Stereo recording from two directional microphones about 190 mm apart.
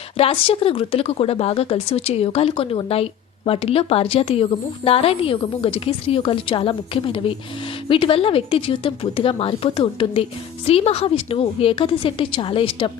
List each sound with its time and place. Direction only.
0.2 s speech: 30° left (ahead or behind)